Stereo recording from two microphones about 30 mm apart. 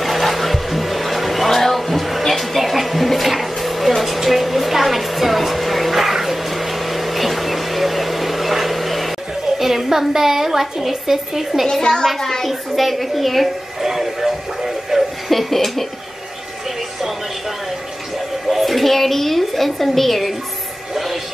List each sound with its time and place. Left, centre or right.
0.0 s music: centre
2.2 s blender: centre
4.0 s a sound: centre
9.6 s a woman's voice: centre
11.8 s a child's voice: left
12.4 s a woman's voice: centre
13.7 s music: centre
15.2 s a woman's voice: centre
18.5 s a woman's voice: centre